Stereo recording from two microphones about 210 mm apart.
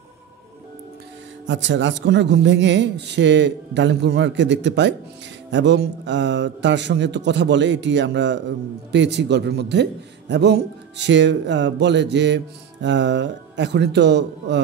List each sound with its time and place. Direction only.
1.4 s a man's voice: 60° right (ahead or behind)